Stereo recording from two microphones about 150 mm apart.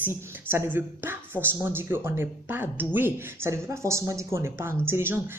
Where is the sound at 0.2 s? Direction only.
15° right (ahead or behind).